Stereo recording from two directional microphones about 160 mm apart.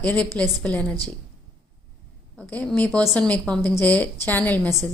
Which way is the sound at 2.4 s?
10° left (ahead or behind).